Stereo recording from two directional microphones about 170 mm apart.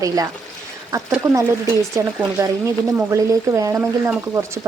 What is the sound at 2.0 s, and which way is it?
Speech, 15° right (ahead or behind).